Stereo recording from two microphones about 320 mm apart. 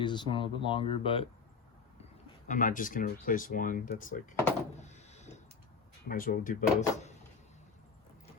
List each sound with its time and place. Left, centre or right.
0.0 s speech: centre
2.5 s speech: left
4.8 s a sound: left
6.1 s speech: left